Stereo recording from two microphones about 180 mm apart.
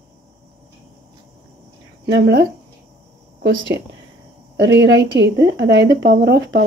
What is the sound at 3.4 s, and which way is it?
A woman's voice, 85° right.